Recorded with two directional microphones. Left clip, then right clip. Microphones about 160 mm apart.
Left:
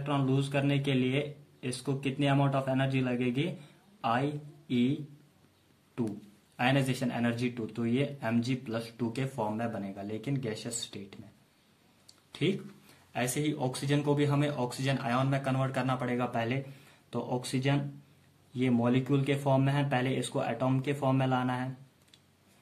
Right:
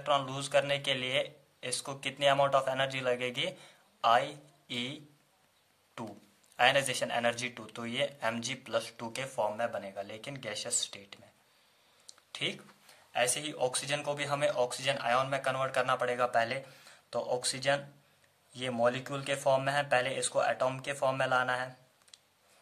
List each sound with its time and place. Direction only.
0.0 s a man's voice: 45° right (ahead or behind)
6.5 s speech: 40° right (ahead or behind)
12.3 s speech: 30° right (ahead or behind)